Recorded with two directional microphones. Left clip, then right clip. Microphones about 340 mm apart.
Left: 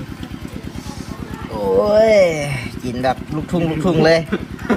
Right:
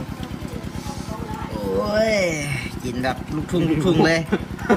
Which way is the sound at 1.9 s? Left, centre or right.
Centre.